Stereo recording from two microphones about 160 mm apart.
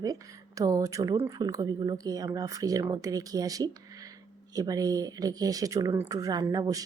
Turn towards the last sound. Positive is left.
turn(degrees=-20)  # may be behind; listen again after turning